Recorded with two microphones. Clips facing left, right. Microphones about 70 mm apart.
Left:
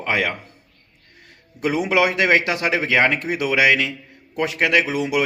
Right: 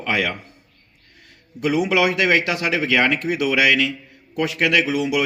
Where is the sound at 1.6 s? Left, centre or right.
Left.